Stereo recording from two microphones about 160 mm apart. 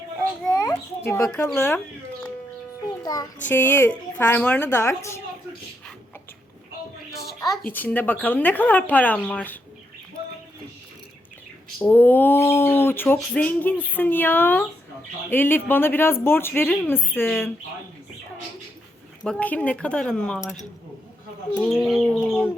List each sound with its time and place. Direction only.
0.4 s a sound: 10° left (ahead or behind)
1.5 s speech: 10° left (ahead or behind)
3.0 s child singing: 25° left (ahead or behind)
3.5 s speech: 10° left (ahead or behind)
7.7 s speech: 10° left (ahead or behind)
11.8 s speech: 10° left (ahead or behind)
19.2 s speech: 5° left (ahead or behind)
21.6 s bird: centre (ahead or behind)